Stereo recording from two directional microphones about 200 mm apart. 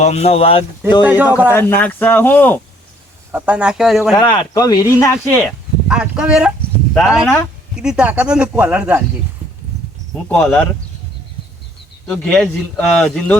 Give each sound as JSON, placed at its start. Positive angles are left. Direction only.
{"t": 0.0, "sound": "speech", "side_deg": 35}
{"t": 1.0, "sound": "a man's voice", "side_deg": -10}
{"t": 1.5, "sound": "speech", "side_deg": 10}
{"t": 3.3, "sound": "speech", "side_deg": -5}
{"t": 4.1, "sound": "speech", "side_deg": 20}
{"t": 5.9, "sound": "speech", "side_deg": -5}
{"t": 10.2, "sound": "speech", "side_deg": 5}
{"t": 12.0, "sound": "speech", "side_deg": 5}